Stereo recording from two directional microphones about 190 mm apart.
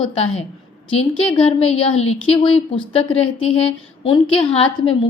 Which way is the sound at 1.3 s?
30° left (ahead or behind).